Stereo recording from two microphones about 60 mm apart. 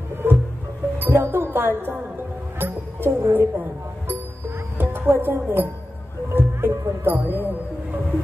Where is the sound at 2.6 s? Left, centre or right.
Right.